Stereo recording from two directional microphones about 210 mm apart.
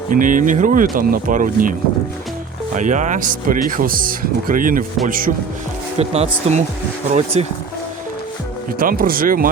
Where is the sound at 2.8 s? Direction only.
35° right (ahead or behind).